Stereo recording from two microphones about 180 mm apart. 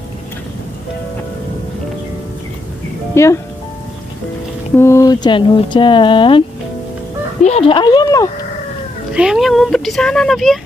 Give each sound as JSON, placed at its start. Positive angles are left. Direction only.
{"t": 3.2, "sound": "speech", "side_deg": 15}
{"t": 4.7, "sound": "speech", "side_deg": 15}
{"t": 7.4, "sound": "speech", "side_deg": 35}
{"t": 9.1, "sound": "speech", "side_deg": -5}